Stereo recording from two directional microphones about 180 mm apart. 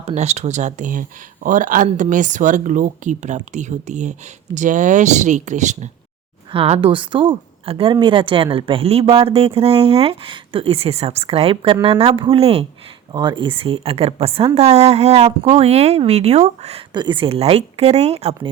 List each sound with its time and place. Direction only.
0.0 s a woman's voice: 40° right (ahead or behind)
16.9 s a woman's voice: 25° right (ahead or behind)